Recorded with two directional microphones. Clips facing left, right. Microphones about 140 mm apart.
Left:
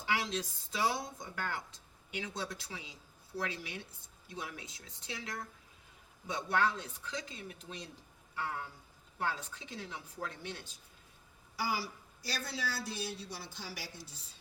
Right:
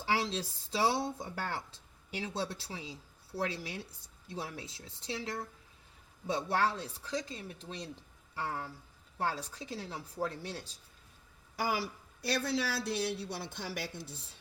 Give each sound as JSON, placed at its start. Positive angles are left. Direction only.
{"t": 0.0, "sound": "speech", "side_deg": -30}
{"t": 11.5, "sound": "a woman's voice", "side_deg": -55}